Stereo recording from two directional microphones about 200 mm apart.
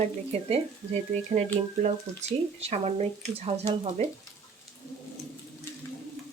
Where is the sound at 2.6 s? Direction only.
30° right (ahead or behind).